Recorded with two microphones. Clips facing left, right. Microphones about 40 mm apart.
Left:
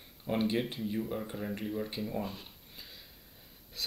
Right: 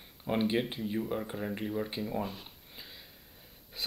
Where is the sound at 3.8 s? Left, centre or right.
Centre.